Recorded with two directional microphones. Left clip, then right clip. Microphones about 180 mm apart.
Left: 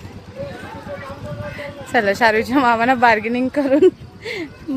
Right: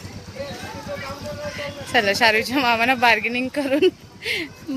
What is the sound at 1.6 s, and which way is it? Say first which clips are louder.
Speech: left 2 dB; 30° left (ahead or behind).